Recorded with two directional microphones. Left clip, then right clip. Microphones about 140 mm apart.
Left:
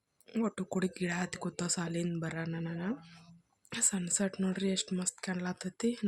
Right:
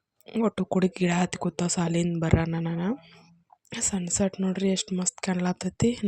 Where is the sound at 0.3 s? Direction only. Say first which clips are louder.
Right 9 dB; 45° right (ahead or behind).